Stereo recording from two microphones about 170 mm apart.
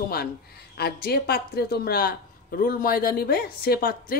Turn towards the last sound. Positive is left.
turn(degrees=65)  # may be behind; listen again after turning